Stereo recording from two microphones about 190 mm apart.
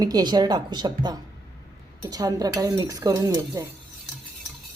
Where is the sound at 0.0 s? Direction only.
20° right (ahead or behind).